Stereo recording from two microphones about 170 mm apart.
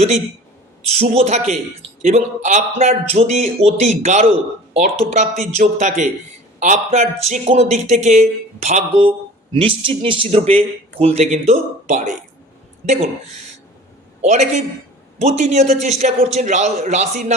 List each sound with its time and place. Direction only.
0.9 s a man's voice: 40° right (ahead or behind)
14.2 s a man's voice: 40° right (ahead or behind)